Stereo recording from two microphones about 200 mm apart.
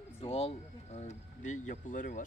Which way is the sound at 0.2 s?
30° left (ahead or behind).